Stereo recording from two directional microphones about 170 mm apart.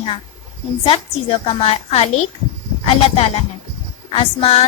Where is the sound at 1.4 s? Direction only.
35° left (ahead or behind).